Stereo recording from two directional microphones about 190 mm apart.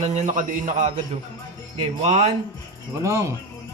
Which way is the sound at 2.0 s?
35° right (ahead or behind).